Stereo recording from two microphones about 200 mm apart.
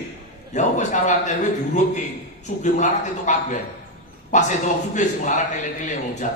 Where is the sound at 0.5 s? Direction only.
35° left (ahead or behind).